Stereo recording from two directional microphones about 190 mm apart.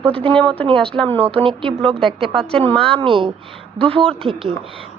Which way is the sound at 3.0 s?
25° right (ahead or behind).